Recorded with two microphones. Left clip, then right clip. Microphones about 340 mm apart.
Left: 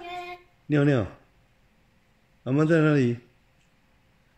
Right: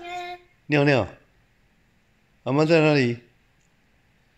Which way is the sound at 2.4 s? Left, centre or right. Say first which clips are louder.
Right 4 dB; centre.